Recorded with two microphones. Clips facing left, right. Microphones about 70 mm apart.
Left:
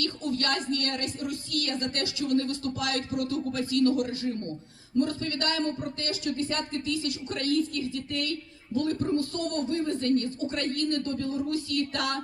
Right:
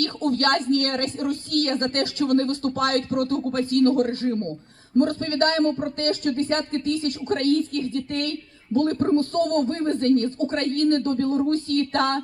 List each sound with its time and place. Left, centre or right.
0.0 s speech: right